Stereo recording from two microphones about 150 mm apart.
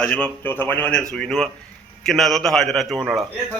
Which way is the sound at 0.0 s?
10° left (ahead or behind).